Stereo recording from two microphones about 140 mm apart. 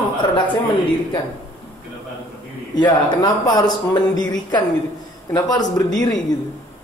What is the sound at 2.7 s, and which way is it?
A man's voice, 30° left (ahead or behind).